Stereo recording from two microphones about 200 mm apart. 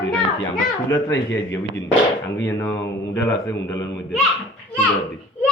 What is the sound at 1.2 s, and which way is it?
Speech, 15° left (ahead or behind).